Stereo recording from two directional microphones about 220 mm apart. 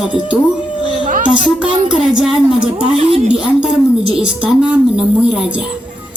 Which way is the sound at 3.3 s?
5° right (ahead or behind).